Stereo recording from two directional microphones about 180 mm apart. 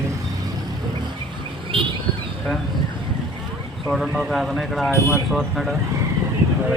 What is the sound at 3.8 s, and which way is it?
Speech, centre (ahead or behind).